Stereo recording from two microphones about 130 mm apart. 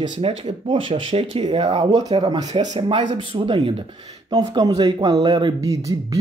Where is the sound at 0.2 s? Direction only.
45° right (ahead or behind).